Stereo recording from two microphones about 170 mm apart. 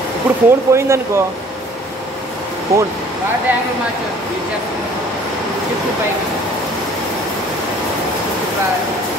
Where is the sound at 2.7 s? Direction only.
15° right (ahead or behind).